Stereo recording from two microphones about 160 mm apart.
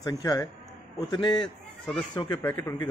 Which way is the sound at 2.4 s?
15° left (ahead or behind).